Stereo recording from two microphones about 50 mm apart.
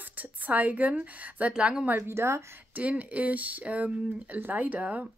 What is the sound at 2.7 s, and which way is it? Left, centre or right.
Speech, right.